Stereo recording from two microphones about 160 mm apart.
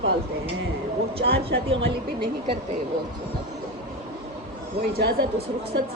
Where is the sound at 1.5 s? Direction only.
90° right.